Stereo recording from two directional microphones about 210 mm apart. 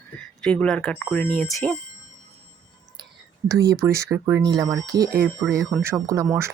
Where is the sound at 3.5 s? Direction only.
15° right (ahead or behind).